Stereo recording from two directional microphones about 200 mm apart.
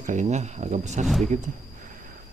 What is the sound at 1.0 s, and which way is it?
Speech, centre (ahead or behind).